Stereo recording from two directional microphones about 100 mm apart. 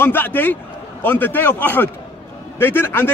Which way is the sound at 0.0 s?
20° left (ahead or behind).